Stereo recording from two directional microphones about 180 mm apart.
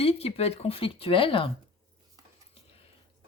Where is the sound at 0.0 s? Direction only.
35° left (ahead or behind).